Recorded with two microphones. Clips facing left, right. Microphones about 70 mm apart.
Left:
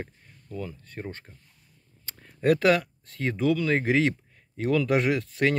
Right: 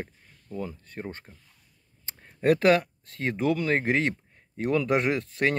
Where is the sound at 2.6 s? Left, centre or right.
Right.